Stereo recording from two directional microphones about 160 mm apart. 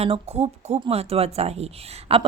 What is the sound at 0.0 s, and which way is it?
Speech, 40° right (ahead or behind).